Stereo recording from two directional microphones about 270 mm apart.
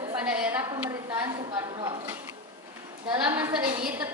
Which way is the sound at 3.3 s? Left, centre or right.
Centre.